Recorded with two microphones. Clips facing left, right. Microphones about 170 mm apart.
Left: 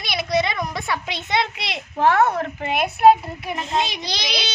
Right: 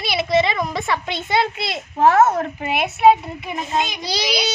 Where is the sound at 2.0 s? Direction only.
40° right (ahead or behind).